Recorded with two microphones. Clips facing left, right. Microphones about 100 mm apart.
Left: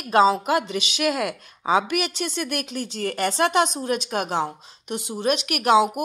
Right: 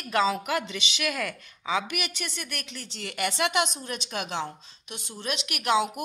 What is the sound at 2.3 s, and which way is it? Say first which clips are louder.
A woman's voice: left 11 dB; 55° left (ahead or behind).